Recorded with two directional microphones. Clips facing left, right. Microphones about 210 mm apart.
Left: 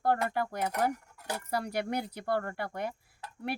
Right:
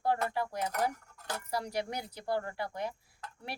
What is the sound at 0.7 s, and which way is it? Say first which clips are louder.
Cutlery: left 3 dB; 10° left (ahead or behind).